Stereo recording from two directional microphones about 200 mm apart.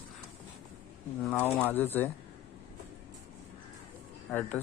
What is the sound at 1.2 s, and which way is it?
Speech, 10° left (ahead or behind).